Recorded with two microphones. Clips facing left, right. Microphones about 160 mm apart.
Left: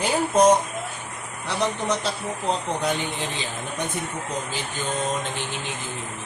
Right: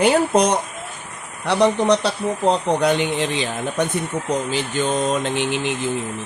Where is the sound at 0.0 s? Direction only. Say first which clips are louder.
Right 3 dB; 70° right (ahead or behind).